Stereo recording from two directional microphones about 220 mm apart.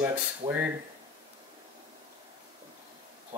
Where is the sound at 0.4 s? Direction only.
20° right (ahead or behind).